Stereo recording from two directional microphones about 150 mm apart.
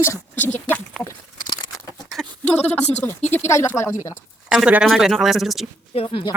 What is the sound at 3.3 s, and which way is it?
Speech, 20° left (ahead or behind).